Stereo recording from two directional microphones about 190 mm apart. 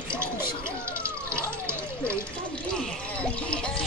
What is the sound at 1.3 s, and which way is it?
Speech, 5° left (ahead or behind).